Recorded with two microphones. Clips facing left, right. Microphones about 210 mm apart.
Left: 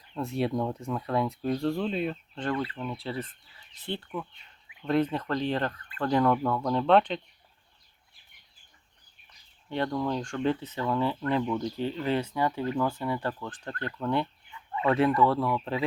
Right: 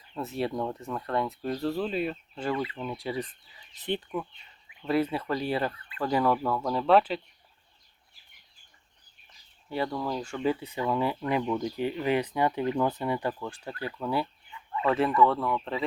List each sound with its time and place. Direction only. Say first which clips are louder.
0.1 s speech: left 2 dB; centre (ahead or behind)
9.6 s speech: left 2 dB; 5° right (ahead or behind)